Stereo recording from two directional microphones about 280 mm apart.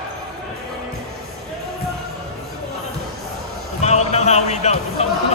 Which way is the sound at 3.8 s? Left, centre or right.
Left.